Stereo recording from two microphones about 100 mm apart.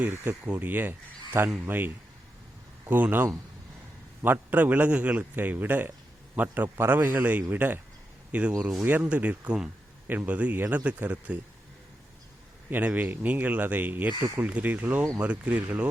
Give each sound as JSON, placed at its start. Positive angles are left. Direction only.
{"t": 0.0, "sound": "a man's voice", "side_deg": -20}
{"t": 12.7, "sound": "a man's voice", "side_deg": -15}